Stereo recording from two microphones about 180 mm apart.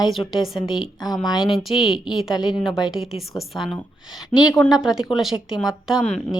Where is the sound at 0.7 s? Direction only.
25° left (ahead or behind).